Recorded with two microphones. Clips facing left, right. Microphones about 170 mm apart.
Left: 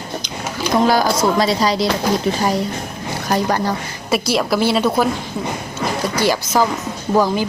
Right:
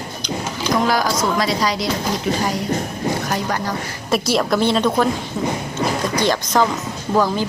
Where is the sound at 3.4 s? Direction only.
30° left (ahead or behind).